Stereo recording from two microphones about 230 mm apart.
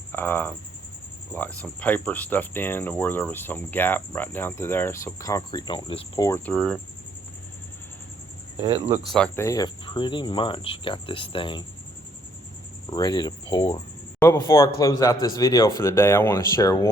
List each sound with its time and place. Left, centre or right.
0.1 s speech: centre
9.1 s speech: centre
12.9 s speech: centre